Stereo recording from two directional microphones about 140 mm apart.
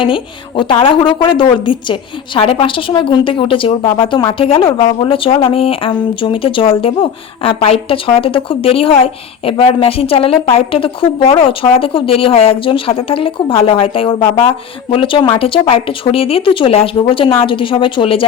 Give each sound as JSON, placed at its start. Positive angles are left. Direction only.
{"t": 0.0, "sound": "a woman's voice", "side_deg": 35}